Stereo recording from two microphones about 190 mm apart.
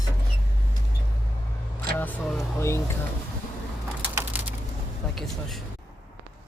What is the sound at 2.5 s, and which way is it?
Speech, 15° left (ahead or behind).